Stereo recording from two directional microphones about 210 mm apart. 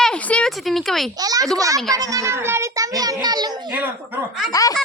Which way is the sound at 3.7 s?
10° right (ahead or behind).